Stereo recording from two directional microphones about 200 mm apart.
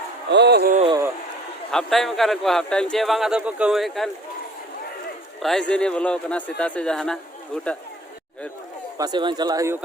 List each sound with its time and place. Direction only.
0.3 s speech: 55° right (ahead or behind)
1.7 s speech: centre (ahead or behind)
5.4 s speech: centre (ahead or behind)
9.0 s speech: 20° right (ahead or behind)